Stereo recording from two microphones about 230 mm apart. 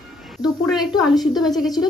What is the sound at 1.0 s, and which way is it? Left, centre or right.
Speech, centre.